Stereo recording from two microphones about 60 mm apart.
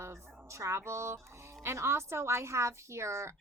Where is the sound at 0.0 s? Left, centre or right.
Right.